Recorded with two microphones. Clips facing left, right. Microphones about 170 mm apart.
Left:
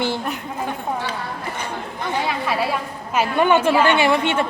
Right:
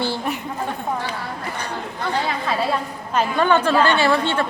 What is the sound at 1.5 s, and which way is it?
A woman's voice, 15° left (ahead or behind).